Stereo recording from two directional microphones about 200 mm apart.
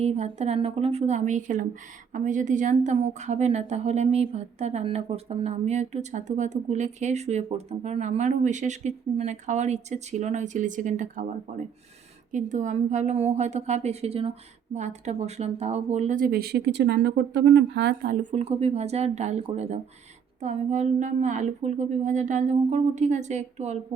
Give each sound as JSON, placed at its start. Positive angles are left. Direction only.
{"t": 0.0, "sound": "a woman's voice", "side_deg": -30}